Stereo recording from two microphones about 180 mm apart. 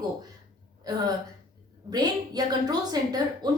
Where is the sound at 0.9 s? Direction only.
20° right (ahead or behind).